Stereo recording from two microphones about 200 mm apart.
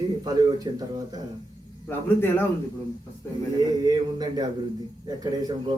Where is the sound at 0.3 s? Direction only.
20° right (ahead or behind).